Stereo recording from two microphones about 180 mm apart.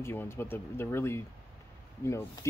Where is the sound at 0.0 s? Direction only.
15° left (ahead or behind).